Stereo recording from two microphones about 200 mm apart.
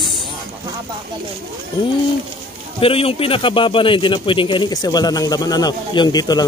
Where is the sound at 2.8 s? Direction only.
30° left (ahead or behind).